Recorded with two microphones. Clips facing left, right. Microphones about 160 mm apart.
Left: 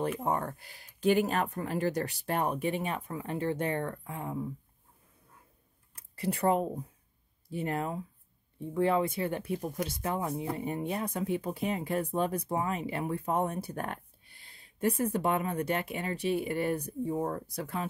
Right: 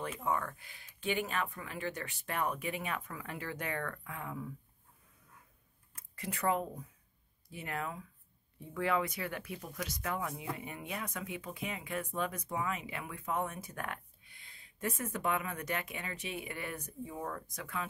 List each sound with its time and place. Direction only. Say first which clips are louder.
0.2 s speech: left 4 dB; 35° left (ahead or behind)
5.9 s speech: left 8 dB; 30° left (ahead or behind)
9.5 s speech: left 9 dB; 45° left (ahead or behind)
9.8 s speech: left 5 dB; 25° left (ahead or behind)